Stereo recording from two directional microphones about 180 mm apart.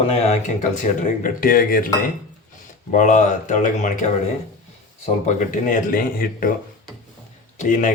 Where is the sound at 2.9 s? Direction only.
45° left (ahead or behind).